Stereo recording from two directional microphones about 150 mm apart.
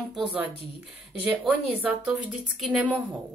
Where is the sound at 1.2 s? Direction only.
10° right (ahead or behind).